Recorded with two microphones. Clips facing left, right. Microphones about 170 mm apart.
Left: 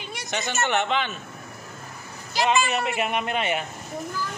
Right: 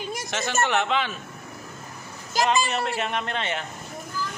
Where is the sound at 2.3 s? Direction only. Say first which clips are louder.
Right 1 dB; 45° right (ahead or behind).